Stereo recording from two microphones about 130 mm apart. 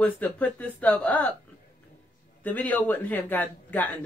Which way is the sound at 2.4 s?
10° left (ahead or behind).